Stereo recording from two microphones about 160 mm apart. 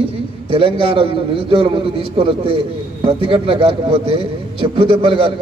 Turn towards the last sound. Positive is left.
turn(degrees=-35)  # may be behind; listen again after turning